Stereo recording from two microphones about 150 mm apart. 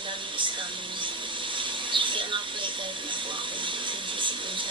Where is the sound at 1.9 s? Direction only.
35° right (ahead or behind).